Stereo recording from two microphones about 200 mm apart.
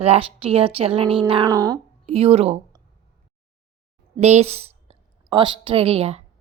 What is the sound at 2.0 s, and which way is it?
Speech, 30° right (ahead or behind).